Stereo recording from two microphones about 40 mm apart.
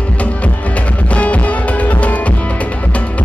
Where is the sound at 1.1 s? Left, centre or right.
Left.